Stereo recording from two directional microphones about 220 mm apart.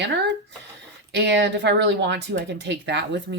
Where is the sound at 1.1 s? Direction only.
50° right (ahead or behind).